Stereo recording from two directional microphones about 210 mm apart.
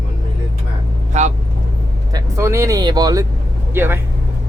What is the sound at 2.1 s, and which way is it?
Speech, 15° right (ahead or behind).